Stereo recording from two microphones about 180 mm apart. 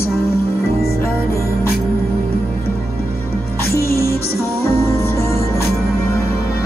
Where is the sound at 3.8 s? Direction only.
60° left (ahead or behind).